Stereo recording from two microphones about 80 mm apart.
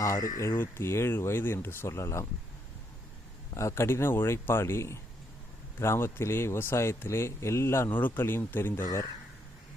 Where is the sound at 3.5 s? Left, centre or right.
Left.